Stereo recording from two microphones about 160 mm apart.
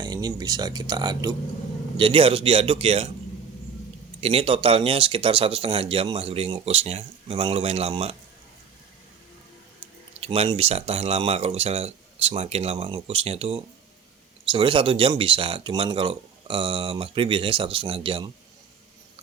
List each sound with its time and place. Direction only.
0.0 s speech: 25° right (ahead or behind)
4.2 s speech: 35° right (ahead or behind)
10.2 s speech: 40° right (ahead or behind)